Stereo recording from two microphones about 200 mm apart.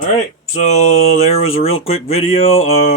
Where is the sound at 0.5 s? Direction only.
35° left (ahead or behind).